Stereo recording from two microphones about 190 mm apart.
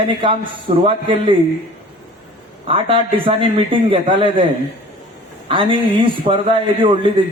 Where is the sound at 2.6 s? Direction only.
30° right (ahead or behind).